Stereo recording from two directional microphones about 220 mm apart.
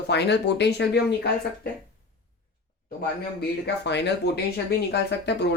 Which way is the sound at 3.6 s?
50° left (ahead or behind).